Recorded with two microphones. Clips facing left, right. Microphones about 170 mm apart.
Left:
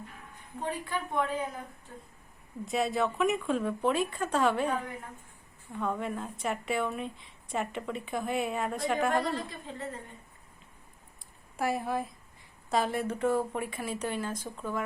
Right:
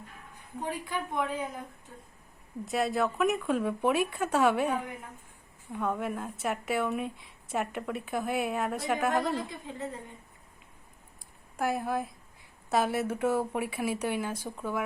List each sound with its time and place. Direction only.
0.6 s speech: 15° right (ahead or behind)
2.6 s a woman's voice: centre (ahead or behind)
9.1 s speech: 15° right (ahead or behind)
11.5 s a woman's voice: centre (ahead or behind)